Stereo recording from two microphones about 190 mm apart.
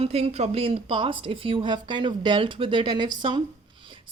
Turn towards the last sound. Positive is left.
turn(degrees=-25)  # may be behind; listen again after turning